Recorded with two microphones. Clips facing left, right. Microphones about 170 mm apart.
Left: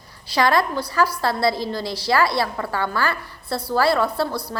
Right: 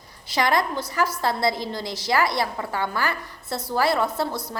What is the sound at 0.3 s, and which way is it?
A woman's voice, 20° right (ahead or behind).